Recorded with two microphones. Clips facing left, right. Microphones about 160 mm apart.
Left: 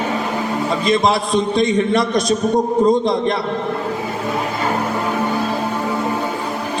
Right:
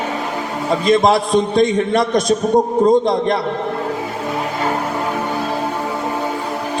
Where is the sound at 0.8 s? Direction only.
50° right (ahead or behind).